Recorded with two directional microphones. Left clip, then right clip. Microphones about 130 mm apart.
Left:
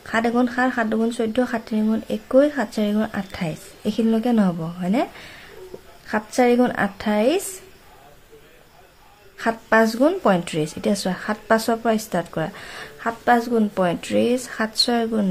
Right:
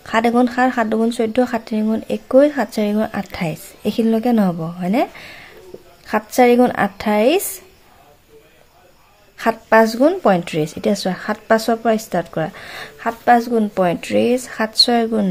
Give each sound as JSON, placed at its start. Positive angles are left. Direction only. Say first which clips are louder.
{"t": 0.0, "sound": "a woman's voice", "louder": "right 5 dB", "side_deg": -30}
{"t": 9.4, "sound": "a woman's voice", "louder": "right 5 dB", "side_deg": -30}